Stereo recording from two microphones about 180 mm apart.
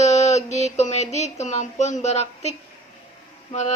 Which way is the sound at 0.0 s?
40° left (ahead or behind).